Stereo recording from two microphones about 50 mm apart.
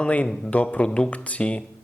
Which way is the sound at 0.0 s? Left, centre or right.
Left.